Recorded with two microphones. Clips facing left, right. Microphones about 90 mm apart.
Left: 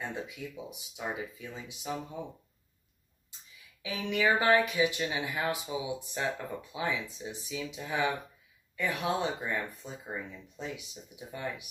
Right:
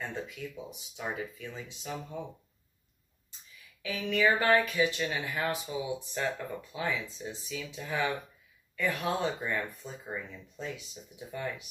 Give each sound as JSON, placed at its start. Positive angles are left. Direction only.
{"t": 0.0, "sound": "speech", "side_deg": 15}
{"t": 3.8, "sound": "speech", "side_deg": 15}